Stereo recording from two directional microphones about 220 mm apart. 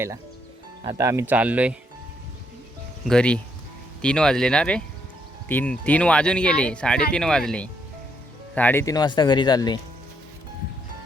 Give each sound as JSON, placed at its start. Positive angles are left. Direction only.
{"t": 0.9, "sound": "speech", "side_deg": -15}
{"t": 3.1, "sound": "speech", "side_deg": 5}